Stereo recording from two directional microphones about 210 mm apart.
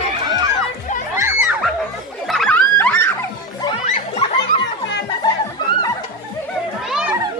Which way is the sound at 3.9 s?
30° left (ahead or behind).